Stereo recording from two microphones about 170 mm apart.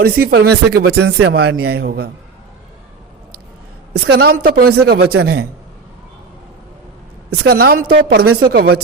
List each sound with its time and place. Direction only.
0.0 s speech: 65° right (ahead or behind)
3.9 s speech: 70° right (ahead or behind)
7.3 s a woman's voice: 65° right (ahead or behind)